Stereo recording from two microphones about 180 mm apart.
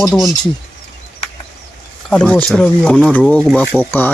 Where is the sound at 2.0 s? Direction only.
5° left (ahead or behind).